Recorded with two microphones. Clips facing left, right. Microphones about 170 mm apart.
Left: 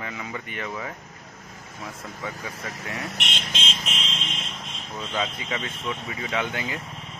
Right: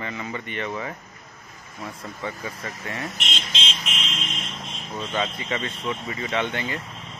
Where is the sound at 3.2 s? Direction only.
60° left (ahead or behind).